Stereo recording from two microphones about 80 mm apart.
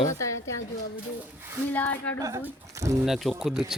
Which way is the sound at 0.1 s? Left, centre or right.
Left.